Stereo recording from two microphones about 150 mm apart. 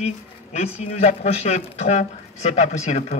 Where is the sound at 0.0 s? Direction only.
50° left (ahead or behind).